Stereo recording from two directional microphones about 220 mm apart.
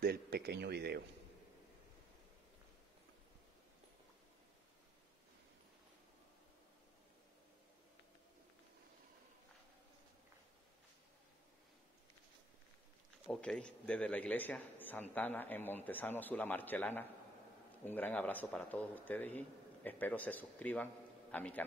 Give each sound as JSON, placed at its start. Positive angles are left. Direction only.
{"t": 0.0, "sound": "speech", "side_deg": -45}
{"t": 13.3, "sound": "a man's voice", "side_deg": 5}